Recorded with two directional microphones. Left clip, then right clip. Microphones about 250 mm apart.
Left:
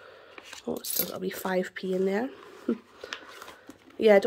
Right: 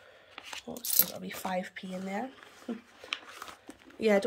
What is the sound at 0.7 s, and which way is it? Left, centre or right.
Speech, left.